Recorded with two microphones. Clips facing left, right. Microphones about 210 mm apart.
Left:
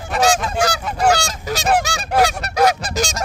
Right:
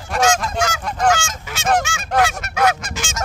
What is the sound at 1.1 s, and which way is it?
Goose, 35° left (ahead or behind).